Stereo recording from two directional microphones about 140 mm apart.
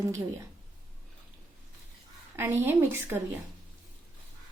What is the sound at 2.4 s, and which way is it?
Speech, 15° right (ahead or behind).